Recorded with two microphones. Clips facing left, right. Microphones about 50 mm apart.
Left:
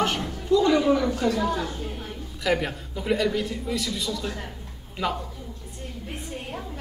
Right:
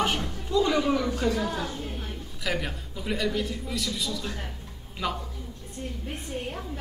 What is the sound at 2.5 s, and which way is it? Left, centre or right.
A man's voice, centre.